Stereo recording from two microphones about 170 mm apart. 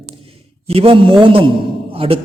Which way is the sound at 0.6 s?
35° right (ahead or behind).